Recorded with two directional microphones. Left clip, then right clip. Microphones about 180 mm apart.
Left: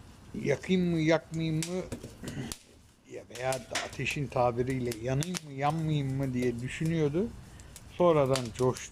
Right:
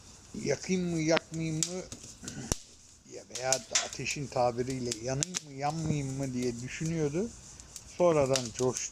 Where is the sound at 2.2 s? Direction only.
Centre (ahead or behind).